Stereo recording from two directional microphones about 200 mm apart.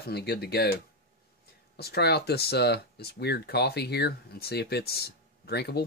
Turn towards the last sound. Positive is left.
turn(degrees=55)  # may be behind; listen again after turning